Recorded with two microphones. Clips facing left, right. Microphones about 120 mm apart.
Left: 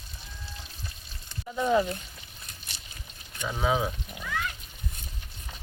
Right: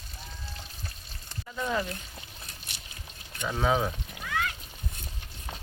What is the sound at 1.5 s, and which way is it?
Speech, 20° left (ahead or behind).